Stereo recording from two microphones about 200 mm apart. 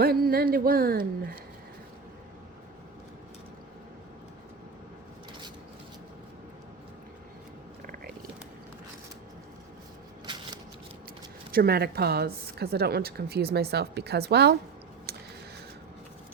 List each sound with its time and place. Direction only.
0.0 s a woman's voice: 50° right (ahead or behind)
11.5 s a woman's voice: 50° right (ahead or behind)